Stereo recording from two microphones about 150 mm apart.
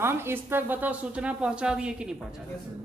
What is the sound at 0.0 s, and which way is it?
A woman's voice, 15° right (ahead or behind).